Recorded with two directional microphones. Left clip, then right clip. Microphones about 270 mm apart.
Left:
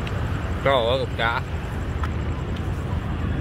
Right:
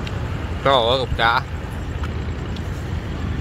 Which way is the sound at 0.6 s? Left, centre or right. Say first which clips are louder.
Right 4 dB; centre.